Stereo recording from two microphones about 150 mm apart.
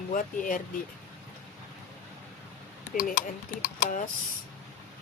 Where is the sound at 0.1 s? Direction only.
60° left (ahead or behind).